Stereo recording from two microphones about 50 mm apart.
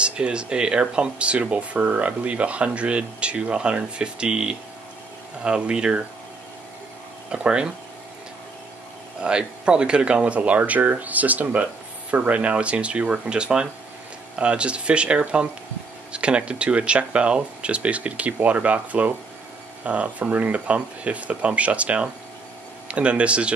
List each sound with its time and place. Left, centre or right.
0.0 s speech: centre
7.2 s speech: centre
9.2 s speech: centre
13.3 s speech: centre